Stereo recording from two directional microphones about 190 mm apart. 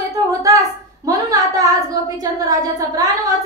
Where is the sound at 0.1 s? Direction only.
20° right (ahead or behind).